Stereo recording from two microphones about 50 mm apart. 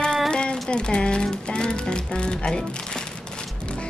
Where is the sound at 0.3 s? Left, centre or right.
Centre.